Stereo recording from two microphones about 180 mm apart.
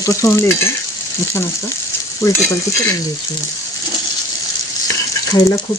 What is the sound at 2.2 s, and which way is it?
Stir, 15° left (ahead or behind).